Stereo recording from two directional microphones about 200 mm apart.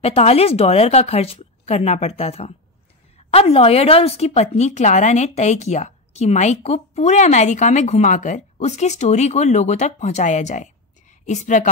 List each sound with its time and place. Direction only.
0.0 s speech: 30° left (ahead or behind)